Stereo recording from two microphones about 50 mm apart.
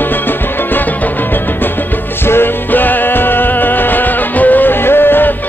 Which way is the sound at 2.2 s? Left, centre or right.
Left.